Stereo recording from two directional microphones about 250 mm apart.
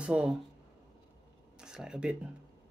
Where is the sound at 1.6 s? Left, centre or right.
Centre.